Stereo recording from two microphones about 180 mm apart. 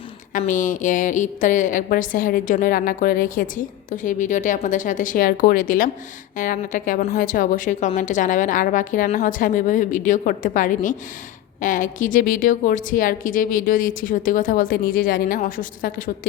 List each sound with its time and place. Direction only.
0.3 s a woman's voice: 45° left (ahead or behind)